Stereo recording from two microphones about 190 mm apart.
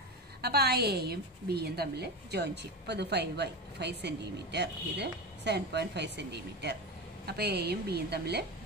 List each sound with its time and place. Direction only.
0.4 s a woman's voice: 60° right (ahead or behind)